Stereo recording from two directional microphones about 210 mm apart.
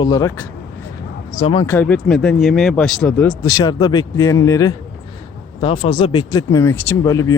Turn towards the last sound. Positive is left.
turn(degrees=15)  # may be behind; listen again after turning